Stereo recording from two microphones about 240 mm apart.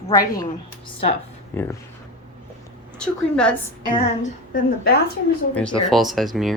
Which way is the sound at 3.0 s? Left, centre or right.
Centre.